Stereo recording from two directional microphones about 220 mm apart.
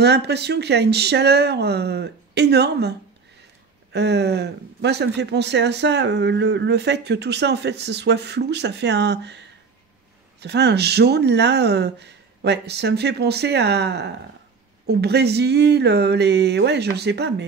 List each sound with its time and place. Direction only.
0.0 s speech: 50° right (ahead or behind)
3.9 s speech: 50° right (ahead or behind)